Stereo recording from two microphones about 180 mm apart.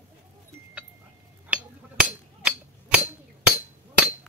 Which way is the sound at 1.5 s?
5° right (ahead or behind).